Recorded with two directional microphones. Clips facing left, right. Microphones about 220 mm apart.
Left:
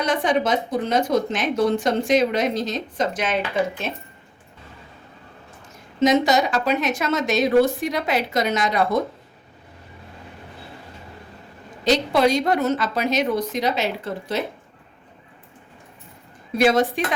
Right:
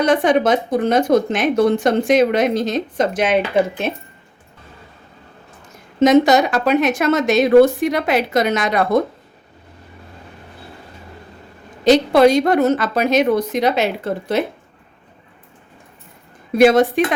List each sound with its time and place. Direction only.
0.0 s speech: 55° right (ahead or behind)
6.0 s speech: 55° right (ahead or behind)
11.9 s speech: 55° right (ahead or behind)
16.6 s speech: 55° right (ahead or behind)